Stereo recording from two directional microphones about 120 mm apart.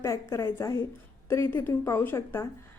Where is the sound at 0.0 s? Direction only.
25° left (ahead or behind).